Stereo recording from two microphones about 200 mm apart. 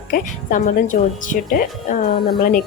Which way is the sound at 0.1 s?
40° left (ahead or behind).